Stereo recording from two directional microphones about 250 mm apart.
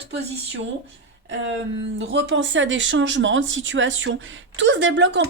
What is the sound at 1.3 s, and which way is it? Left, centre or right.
Speech, right.